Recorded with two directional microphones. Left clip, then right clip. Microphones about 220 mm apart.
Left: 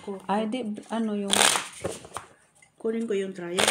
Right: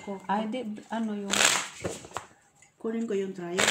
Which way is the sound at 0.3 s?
45° left (ahead or behind).